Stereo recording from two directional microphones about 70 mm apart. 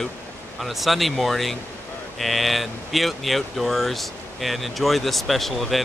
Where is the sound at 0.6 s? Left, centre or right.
Centre.